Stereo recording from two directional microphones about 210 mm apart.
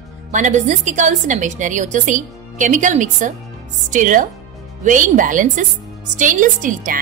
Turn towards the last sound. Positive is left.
turn(degrees=-40)  # may be behind; listen again after turning